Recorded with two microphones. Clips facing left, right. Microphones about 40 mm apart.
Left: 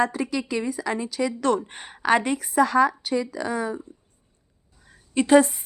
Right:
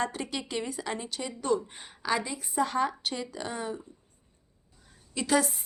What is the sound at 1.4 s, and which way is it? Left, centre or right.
Speech, left.